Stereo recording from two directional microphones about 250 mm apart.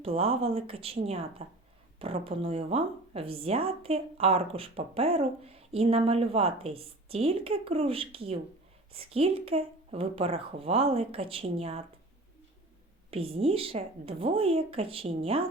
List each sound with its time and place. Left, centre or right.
0.0 s a woman's voice: right
13.1 s a woman's voice: right